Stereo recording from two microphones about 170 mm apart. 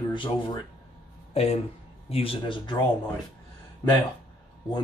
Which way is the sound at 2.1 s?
35° left (ahead or behind).